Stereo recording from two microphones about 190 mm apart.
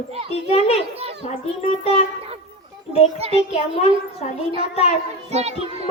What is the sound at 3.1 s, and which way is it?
Speech, 30° right (ahead or behind).